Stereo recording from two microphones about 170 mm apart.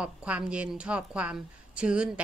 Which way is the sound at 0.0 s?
5° right (ahead or behind).